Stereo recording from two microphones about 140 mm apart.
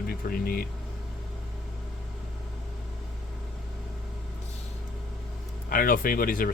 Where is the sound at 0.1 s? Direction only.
90° left.